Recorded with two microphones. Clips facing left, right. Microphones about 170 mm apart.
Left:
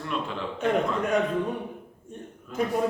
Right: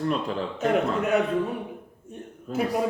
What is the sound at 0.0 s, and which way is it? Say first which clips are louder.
Speech: right 5 dB; 35° right (ahead or behind).